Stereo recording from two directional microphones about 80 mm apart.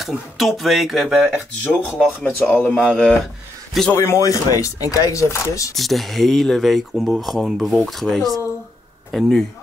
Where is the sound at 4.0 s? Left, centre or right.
Left.